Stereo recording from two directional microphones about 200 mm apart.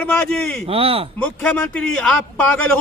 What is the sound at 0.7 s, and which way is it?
Speech, 30° right (ahead or behind).